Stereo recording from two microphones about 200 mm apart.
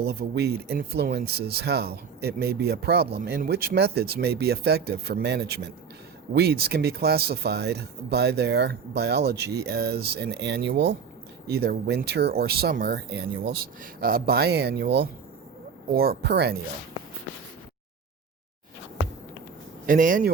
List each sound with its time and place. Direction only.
0.0 s speech: 50° right (ahead or behind)
19.9 s speech: 40° right (ahead or behind)